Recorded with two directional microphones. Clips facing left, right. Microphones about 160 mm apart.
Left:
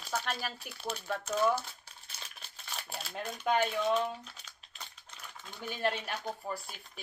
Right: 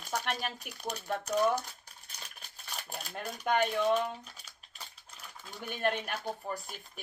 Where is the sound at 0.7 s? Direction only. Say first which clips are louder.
Right 1 dB; 60° right (ahead or behind).